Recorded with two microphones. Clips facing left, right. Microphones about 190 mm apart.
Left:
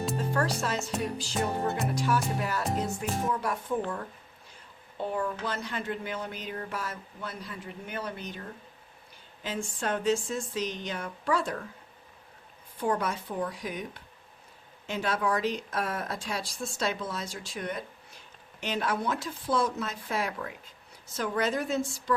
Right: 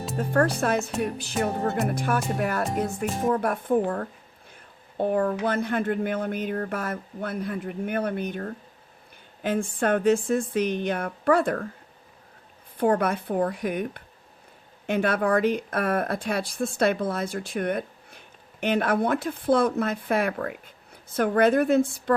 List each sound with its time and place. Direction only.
0.2 s speech: 55° right (ahead or behind)
4.9 s speech: 55° right (ahead or behind)
12.7 s speech: 60° right (ahead or behind)